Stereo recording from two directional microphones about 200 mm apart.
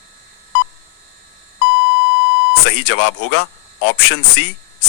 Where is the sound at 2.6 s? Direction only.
70° left (ahead or behind).